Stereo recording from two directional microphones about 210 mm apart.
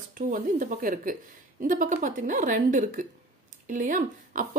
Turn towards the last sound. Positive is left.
turn(degrees=-35)  # may be behind; listen again after turning